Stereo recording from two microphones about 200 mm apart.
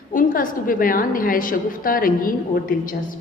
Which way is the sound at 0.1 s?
40° left (ahead or behind).